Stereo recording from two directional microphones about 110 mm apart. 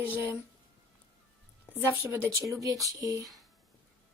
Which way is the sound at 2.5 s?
30° right (ahead or behind).